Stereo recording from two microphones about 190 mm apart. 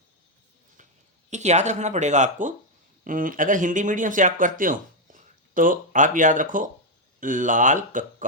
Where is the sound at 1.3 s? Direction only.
35° right (ahead or behind).